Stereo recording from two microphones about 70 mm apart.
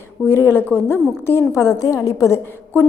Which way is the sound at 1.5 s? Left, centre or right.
Left.